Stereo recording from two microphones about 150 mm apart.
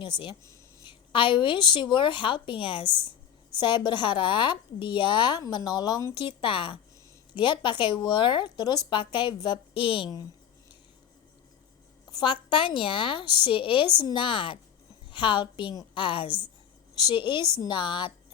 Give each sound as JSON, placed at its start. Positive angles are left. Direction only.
{"t": 0.0, "sound": "a woman's voice", "side_deg": 30}
{"t": 6.1, "sound": "a woman's voice", "side_deg": 35}
{"t": 12.1, "sound": "a woman's voice", "side_deg": 30}